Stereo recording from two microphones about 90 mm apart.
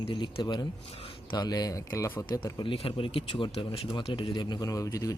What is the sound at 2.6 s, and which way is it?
Speech, 90° left.